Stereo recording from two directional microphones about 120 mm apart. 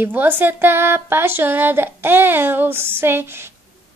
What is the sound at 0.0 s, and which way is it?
A woman's voice, 15° right (ahead or behind).